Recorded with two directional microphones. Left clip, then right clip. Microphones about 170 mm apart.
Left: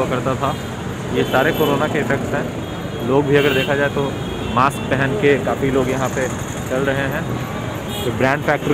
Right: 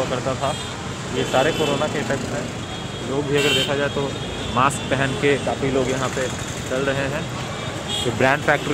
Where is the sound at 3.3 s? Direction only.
5° right (ahead or behind).